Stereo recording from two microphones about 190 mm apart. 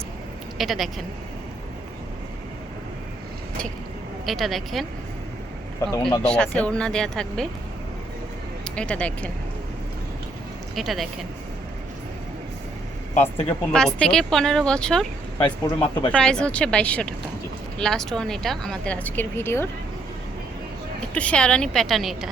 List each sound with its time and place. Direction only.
0.6 s speech: centre (ahead or behind)
4.3 s speech: centre (ahead or behind)
5.8 s speech: 15° left (ahead or behind)
6.2 s speech: 5° left (ahead or behind)
8.6 s speech: 5° left (ahead or behind)
10.8 s speech: centre (ahead or behind)
13.5 s speech: 5° left (ahead or behind)
21.1 s speech: 5° left (ahead or behind)